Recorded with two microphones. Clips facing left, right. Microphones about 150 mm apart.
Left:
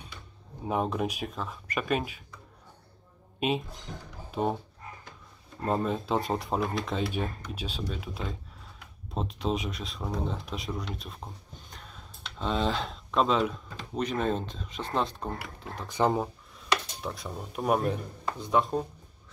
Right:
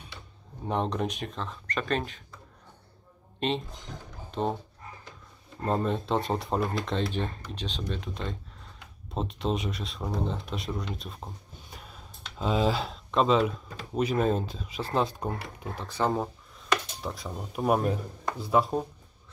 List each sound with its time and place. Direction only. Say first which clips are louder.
0.7 s speech: even; 5° left (ahead or behind)
3.3 s speech: left 1 dB; 10° left (ahead or behind)
5.6 s speech: right 1 dB; centre (ahead or behind)
15.9 s speech: left 2 dB; 15° left (ahead or behind)
17.0 s speech: right 1 dB; centre (ahead or behind)